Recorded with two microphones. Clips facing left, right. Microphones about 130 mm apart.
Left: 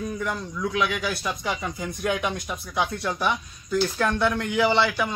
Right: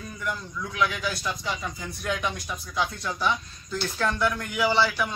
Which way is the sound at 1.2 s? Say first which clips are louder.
Left 3 dB; 20° left (ahead or behind).